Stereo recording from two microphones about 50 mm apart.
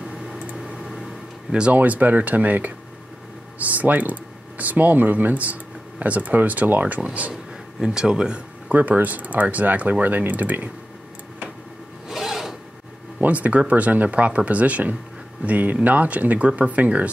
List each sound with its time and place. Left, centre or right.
1.5 s speech: right
1.8 s speech: right
7.8 s speech: centre
8.6 s speech: right
12.1 s filing: centre
13.2 s speech: right